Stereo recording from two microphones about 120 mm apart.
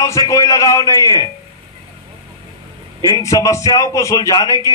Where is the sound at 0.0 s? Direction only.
25° left (ahead or behind).